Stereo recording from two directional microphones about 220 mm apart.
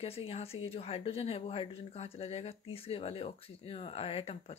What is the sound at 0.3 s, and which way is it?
A woman's voice, 30° left (ahead or behind).